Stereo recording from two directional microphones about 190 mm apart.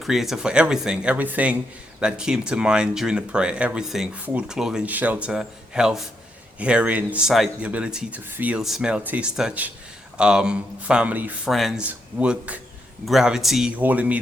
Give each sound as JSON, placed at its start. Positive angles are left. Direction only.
{"t": 0.0, "sound": "speech", "side_deg": 0}